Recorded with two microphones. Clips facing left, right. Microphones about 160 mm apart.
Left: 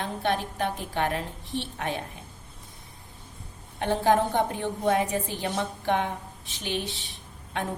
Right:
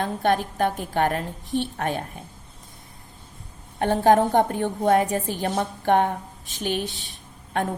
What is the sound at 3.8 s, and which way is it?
A woman's voice, 50° right (ahead or behind).